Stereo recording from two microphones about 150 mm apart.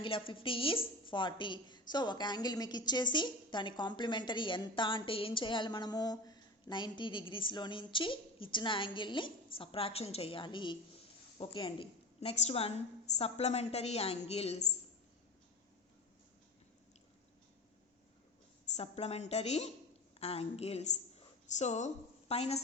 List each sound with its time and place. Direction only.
0.0 s a woman's voice: 35° left (ahead or behind)
18.8 s a woman's voice: 45° left (ahead or behind)